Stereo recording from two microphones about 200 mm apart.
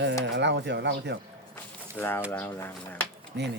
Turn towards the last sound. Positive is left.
turn(degrees=-60)  # may be behind; listen again after turning